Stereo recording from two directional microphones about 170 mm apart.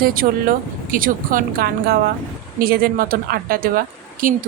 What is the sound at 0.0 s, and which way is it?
A woman's voice, 55° right (ahead or behind).